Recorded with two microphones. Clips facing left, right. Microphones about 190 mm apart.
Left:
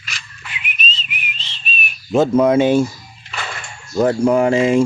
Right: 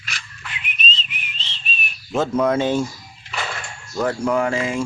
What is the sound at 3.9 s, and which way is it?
Speech, 20° left (ahead or behind).